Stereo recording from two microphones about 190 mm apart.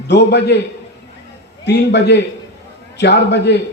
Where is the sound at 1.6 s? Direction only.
65° left (ahead or behind).